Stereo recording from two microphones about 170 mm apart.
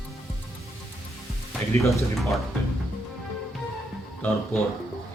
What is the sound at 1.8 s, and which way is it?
Speech, centre (ahead or behind).